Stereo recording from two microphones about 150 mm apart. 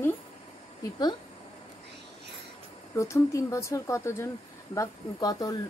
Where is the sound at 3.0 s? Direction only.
20° left (ahead or behind).